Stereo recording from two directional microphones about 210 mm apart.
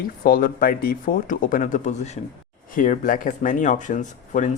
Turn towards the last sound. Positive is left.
turn(degrees=35)  # may be behind; listen again after turning